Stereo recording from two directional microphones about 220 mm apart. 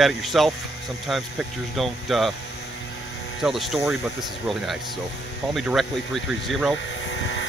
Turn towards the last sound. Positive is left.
turn(degrees=55)  # may be behind; listen again after turning